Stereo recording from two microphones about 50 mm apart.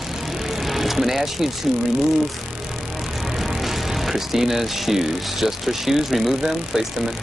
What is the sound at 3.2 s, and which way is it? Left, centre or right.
Speech, centre.